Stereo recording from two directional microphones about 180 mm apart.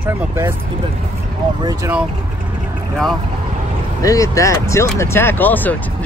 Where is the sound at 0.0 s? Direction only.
15° right (ahead or behind).